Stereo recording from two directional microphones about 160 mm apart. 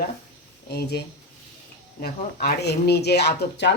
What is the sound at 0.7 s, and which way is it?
Speech, 85° left.